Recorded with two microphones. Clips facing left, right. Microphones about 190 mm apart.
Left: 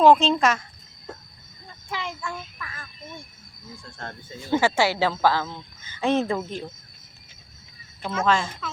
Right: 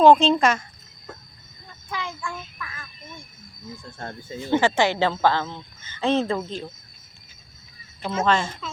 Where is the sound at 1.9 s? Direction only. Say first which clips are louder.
Even; 25° left (ahead or behind).